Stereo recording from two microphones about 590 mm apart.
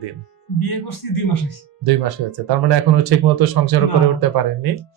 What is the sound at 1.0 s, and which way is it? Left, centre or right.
Speech, left.